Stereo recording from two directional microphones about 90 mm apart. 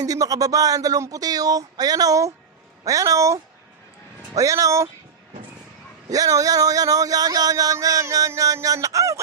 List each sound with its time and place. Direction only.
0.0 s speech: 40° right (ahead or behind)
6.1 s speech: 40° right (ahead or behind)
8.3 s fowl: 35° right (ahead or behind)